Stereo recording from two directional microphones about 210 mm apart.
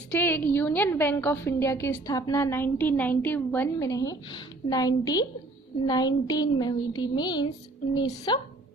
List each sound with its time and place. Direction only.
0.1 s a woman's voice: 10° left (ahead or behind)